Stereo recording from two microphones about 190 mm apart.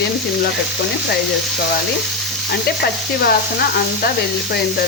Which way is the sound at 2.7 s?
55° left (ahead or behind).